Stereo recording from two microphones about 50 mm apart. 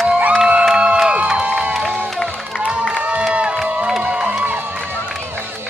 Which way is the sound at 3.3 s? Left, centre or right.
Right.